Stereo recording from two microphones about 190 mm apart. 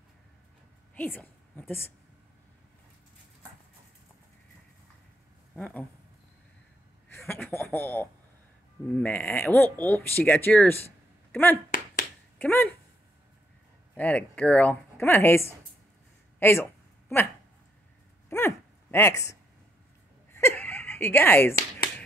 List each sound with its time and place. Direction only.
0.9 s a woman's voice: 10° left (ahead or behind)
5.6 s speech: 5° left (ahead or behind)
7.2 s speech: 10° left (ahead or behind)
11.7 s finger snapping: 45° left (ahead or behind)
12.4 s speech: 10° left (ahead or behind)
13.9 s speech: 10° left (ahead or behind)
18.3 s speech: 10° left (ahead or behind)
20.3 s a sound: 10° left (ahead or behind)
21.5 s finger snapping: 55° left (ahead or behind)